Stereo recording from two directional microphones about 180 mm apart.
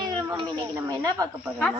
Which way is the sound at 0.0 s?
25° right (ahead or behind).